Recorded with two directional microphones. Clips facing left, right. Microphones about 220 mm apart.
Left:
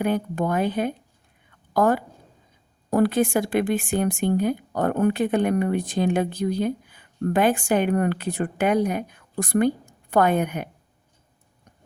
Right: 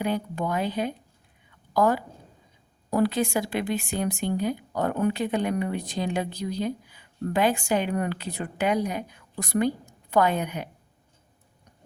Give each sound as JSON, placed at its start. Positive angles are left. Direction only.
{"t": 0.0, "sound": "speech", "side_deg": 50}
{"t": 1.5, "sound": "a sound", "side_deg": 50}
{"t": 2.9, "sound": "speech", "side_deg": 50}